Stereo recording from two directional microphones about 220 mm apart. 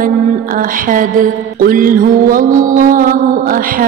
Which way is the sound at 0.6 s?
40° right (ahead or behind).